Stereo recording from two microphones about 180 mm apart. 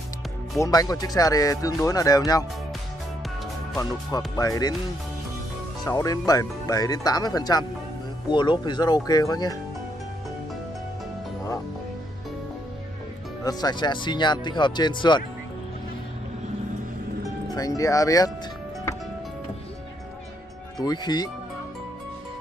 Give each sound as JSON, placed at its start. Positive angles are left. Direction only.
{"t": 0.6, "sound": "speech", "side_deg": 20}
{"t": 3.7, "sound": "speech", "side_deg": 20}
{"t": 5.9, "sound": "speech", "side_deg": 20}
{"t": 13.4, "sound": "speech", "side_deg": 20}
{"t": 17.6, "sound": "speech", "side_deg": 20}
{"t": 20.8, "sound": "speech", "side_deg": 25}